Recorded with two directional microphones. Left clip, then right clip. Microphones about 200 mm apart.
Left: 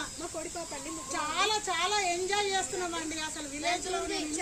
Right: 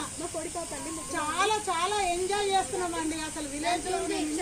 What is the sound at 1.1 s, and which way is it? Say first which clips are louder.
A woman's voice: right 2 dB; 20° left (ahead or behind).